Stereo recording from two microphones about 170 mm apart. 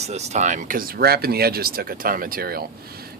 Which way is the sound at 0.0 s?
40° right (ahead or behind).